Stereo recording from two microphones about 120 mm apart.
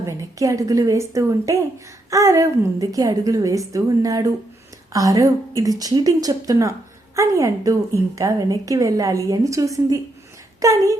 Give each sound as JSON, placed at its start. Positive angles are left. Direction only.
{"t": 0.0, "sound": "a woman's voice", "side_deg": -30}